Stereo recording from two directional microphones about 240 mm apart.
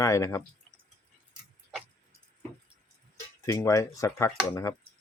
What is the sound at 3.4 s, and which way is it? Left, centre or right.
Speech, centre.